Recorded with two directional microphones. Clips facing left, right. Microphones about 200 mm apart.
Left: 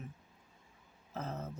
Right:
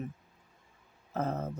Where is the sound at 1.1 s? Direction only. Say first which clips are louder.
Right 8 dB; 55° right (ahead or behind).